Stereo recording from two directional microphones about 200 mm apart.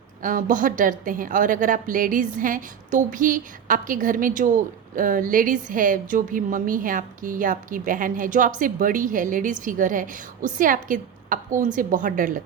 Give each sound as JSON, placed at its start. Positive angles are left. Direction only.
{"t": 0.2, "sound": "a woman's voice", "side_deg": -40}